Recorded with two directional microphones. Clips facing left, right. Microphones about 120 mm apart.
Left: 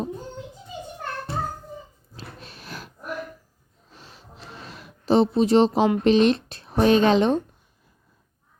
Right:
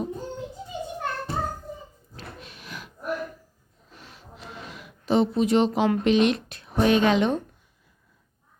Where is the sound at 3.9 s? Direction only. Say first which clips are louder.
Even; 30° left (ahead or behind).